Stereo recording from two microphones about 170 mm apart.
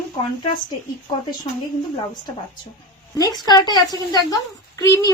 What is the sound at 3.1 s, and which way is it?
A woman's voice, 20° left (ahead or behind).